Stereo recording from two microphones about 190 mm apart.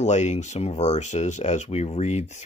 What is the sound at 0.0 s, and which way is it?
Speech, 40° left (ahead or behind).